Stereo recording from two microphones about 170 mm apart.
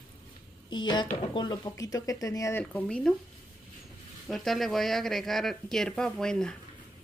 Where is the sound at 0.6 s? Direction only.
25° left (ahead or behind).